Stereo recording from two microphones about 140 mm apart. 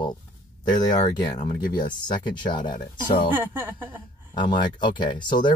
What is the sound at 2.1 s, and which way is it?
Speech, 35° left (ahead or behind).